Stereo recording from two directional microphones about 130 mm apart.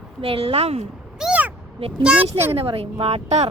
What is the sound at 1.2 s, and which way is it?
Meow, 10° right (ahead or behind).